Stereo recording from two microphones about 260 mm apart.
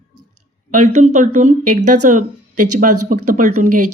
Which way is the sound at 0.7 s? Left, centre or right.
Right.